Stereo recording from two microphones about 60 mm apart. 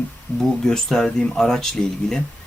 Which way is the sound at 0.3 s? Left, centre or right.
Centre.